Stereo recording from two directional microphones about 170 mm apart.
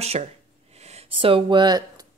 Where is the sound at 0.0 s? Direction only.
40° right (ahead or behind).